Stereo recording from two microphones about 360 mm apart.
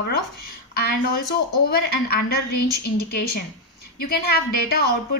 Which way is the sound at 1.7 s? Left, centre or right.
Left.